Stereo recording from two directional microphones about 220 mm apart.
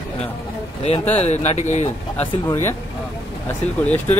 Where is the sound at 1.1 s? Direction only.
30° left (ahead or behind).